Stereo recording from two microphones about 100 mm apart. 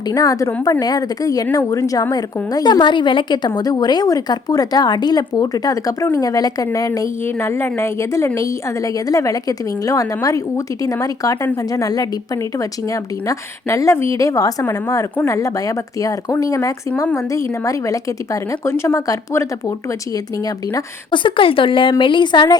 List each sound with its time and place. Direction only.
0.1 s a woman's voice: 35° left (ahead or behind)
7.3 s a woman's voice: 25° left (ahead or behind)
21.1 s a woman's voice: 55° left (ahead or behind)